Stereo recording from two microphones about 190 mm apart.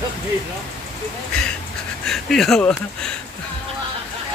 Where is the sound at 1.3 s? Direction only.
5° left (ahead or behind).